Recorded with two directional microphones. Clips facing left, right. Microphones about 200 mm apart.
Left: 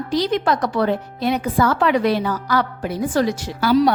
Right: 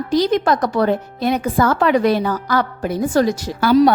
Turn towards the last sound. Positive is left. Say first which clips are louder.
# right 3 dB
turn(degrees=-50)  # may be behind; listen again after turning